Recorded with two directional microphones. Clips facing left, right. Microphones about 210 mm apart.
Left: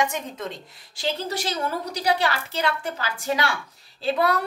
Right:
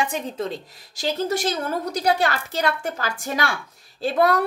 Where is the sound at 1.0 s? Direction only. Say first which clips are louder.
Right 4 dB; 45° right (ahead or behind).